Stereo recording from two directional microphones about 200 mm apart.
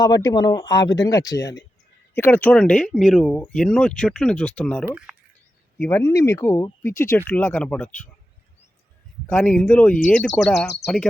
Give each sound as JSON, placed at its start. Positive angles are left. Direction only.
{"t": 0.0, "sound": "speech", "side_deg": 20}
{"t": 9.2, "sound": "speech", "side_deg": 5}